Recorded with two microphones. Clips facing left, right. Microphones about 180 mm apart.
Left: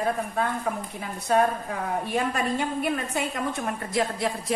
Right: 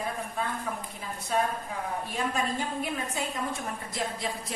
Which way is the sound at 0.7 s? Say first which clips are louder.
Left 6 dB; 65° left (ahead or behind).